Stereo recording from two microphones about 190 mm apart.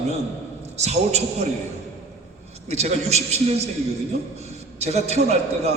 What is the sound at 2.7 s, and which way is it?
A man's voice, 35° right (ahead or behind).